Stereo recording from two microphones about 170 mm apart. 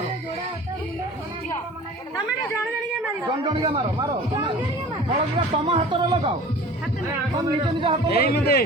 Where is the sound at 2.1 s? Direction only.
20° left (ahead or behind).